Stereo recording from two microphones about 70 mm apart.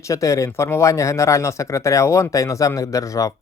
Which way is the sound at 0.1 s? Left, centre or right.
Left.